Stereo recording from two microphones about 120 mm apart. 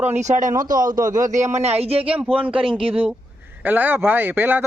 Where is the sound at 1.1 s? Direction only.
90° right; by 2.0 s 55° right (ahead or behind).